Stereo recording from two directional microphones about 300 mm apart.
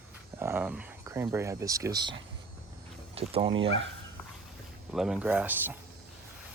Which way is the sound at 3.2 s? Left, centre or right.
Centre.